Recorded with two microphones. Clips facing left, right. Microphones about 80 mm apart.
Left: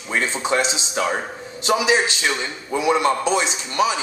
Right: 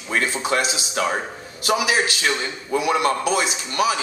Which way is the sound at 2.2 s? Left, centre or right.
Centre.